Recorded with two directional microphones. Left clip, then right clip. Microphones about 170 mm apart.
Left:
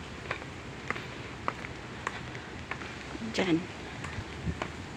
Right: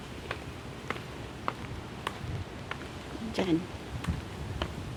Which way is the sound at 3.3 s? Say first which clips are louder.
Left 1 dB; 5° right (ahead or behind).